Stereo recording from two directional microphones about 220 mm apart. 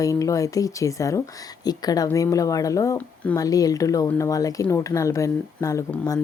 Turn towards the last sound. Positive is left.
turn(degrees=15)  # may be behind; listen again after turning